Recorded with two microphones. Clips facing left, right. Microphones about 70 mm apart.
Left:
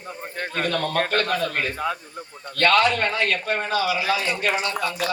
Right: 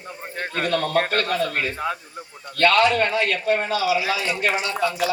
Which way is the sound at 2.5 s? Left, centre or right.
Left.